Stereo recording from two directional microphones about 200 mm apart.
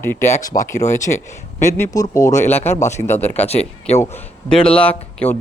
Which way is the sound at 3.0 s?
10° left (ahead or behind).